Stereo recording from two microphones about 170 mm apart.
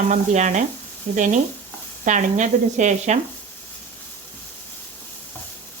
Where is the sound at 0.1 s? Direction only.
45° right (ahead or behind).